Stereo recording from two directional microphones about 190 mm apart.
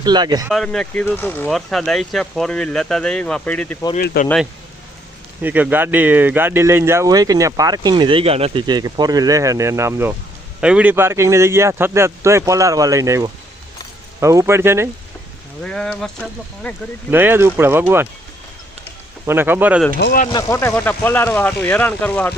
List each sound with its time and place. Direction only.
0.0 s speech: 20° right (ahead or behind)
0.5 s speech: 5° left (ahead or behind)
3.9 s speech: 50° left (ahead or behind)
5.4 s speech: 10° right (ahead or behind)
15.6 s speech: 5° left (ahead or behind)
17.1 s speech: 10° right (ahead or behind)
19.2 s speech: 10° right (ahead or behind)
20.0 s speech: 65° left (ahead or behind)
20.3 s speech: 20° left (ahead or behind)